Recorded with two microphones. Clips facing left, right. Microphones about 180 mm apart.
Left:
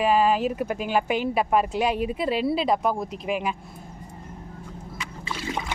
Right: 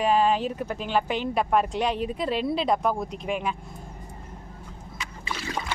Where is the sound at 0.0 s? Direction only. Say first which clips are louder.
Left 1 dB; 5° left (ahead or behind).